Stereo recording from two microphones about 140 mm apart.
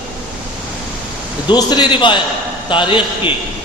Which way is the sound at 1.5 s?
30° left (ahead or behind).